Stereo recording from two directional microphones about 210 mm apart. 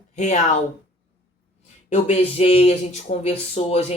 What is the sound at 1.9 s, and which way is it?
Speech, 30° left (ahead or behind).